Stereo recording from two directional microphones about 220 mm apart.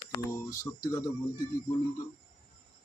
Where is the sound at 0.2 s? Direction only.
15° left (ahead or behind).